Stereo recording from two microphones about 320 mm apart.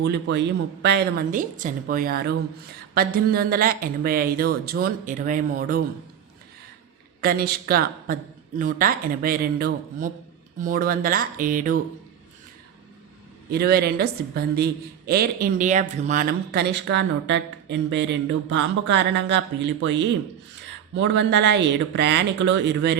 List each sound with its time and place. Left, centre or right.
0.0 s speech: right
7.2 s speech: right
13.5 s a man's voice: right